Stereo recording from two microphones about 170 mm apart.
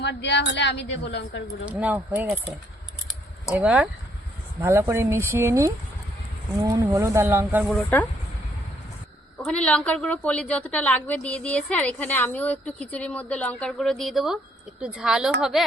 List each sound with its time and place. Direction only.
0.0 s a woman's voice: 90° left
1.6 s speech: 10° right (ahead or behind)
3.1 s keys jangling: 5° right (ahead or behind)
4.6 s speech: 15° right (ahead or behind)
6.9 s speech: 15° right (ahead or behind)
9.4 s a woman's voice: 5° left (ahead or behind)